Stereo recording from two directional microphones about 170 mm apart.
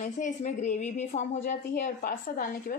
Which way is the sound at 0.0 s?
45° left (ahead or behind).